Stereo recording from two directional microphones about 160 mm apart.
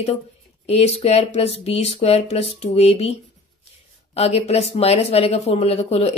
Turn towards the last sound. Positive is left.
turn(degrees=40)  # may be behind; listen again after turning